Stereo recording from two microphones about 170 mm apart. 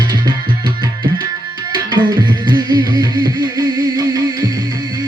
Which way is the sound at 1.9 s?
25° right (ahead or behind).